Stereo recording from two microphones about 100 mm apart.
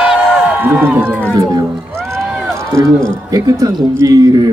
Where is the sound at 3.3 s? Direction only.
35° right (ahead or behind).